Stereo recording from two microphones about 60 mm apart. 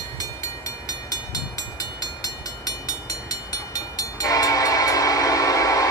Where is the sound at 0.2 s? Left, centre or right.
Left.